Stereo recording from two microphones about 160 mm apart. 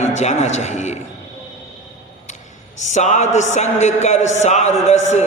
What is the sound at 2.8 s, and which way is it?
A man's voice, 50° left (ahead or behind).